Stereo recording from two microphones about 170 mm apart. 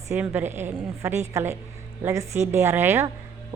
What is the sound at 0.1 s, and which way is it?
A woman's voice, 10° right (ahead or behind).